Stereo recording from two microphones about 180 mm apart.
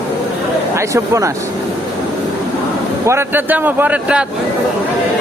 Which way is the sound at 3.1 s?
10° right (ahead or behind).